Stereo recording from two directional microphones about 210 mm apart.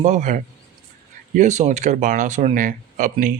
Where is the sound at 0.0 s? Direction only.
35° right (ahead or behind).